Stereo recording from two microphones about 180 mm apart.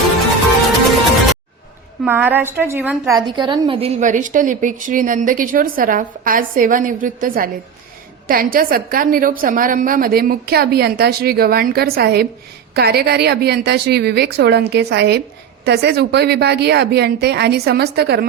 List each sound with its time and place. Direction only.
2.0 s a woman's voice: 10° right (ahead or behind)
3.2 s a woman's voice: 25° right (ahead or behind); by 18.3 s 65° right (ahead or behind)